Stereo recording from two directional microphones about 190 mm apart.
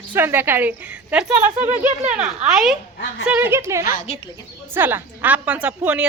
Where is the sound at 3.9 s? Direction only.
35° left (ahead or behind).